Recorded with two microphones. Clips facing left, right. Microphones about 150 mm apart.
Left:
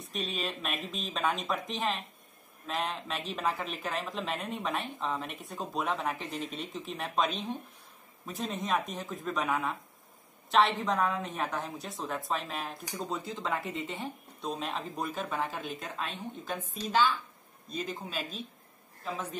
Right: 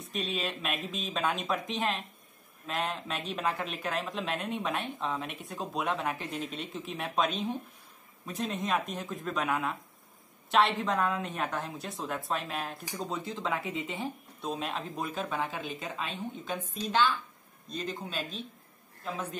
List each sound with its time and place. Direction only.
0.0 s a woman's voice: centre (ahead or behind)